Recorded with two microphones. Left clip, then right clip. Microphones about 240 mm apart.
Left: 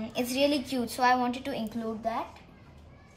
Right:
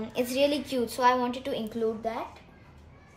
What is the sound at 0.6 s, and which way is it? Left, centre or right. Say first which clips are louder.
Speech: right 2 dB; centre.